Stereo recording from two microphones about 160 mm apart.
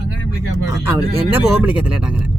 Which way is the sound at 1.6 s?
10° right (ahead or behind).